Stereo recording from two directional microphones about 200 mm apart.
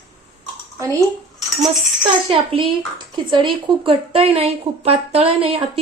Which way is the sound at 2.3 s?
25° right (ahead or behind).